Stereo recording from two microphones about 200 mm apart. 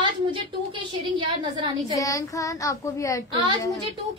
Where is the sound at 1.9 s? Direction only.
15° left (ahead or behind).